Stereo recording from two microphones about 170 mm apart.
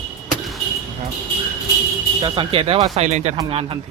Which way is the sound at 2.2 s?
30° right (ahead or behind).